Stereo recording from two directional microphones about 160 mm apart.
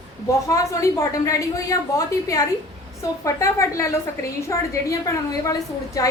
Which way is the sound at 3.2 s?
20° left (ahead or behind).